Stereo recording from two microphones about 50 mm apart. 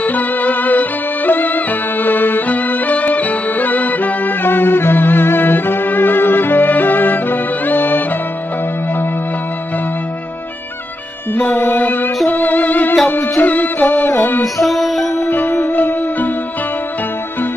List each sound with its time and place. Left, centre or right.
0.0 s music: left
11.3 s music: left
14.4 s music: centre
15.2 s music: left